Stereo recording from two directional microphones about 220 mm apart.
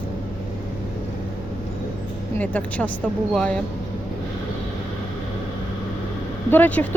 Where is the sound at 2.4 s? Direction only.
5° left (ahead or behind).